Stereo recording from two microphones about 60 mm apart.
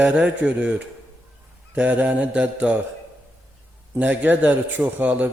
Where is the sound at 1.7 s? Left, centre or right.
Right.